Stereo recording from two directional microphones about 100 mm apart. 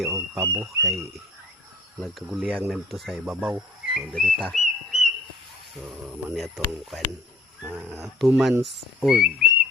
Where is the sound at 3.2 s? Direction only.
15° right (ahead or behind).